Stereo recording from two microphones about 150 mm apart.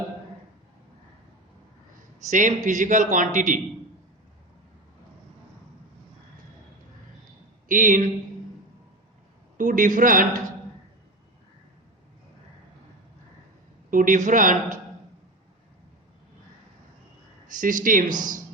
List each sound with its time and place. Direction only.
2.3 s a man's voice: 55° right (ahead or behind)
7.7 s a man's voice: 60° right (ahead or behind)
9.6 s a man's voice: 60° right (ahead or behind)
13.9 s a man's voice: 60° right (ahead or behind)
17.5 s a man's voice: 60° right (ahead or behind)